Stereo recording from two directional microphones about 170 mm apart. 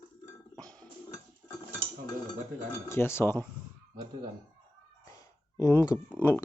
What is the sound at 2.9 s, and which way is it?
Speech, 15° left (ahead or behind).